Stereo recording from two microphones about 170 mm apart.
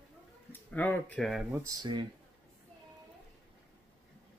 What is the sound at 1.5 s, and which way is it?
Speech, 25° right (ahead or behind).